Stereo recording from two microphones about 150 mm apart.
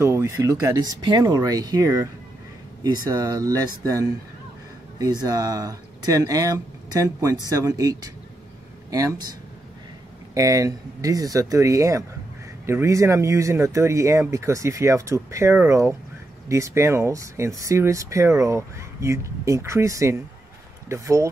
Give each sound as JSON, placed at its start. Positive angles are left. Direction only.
{"t": 0.0, "sound": "speech", "side_deg": -20}
{"t": 10.3, "sound": "speech", "side_deg": -20}